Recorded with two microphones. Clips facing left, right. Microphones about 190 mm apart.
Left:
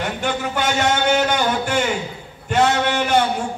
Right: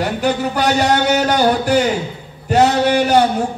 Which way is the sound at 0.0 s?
40° right (ahead or behind).